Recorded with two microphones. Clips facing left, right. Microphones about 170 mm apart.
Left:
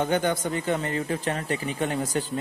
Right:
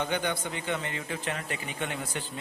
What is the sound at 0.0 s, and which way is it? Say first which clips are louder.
A man's voice: left 6 dB; 45° left (ahead or behind).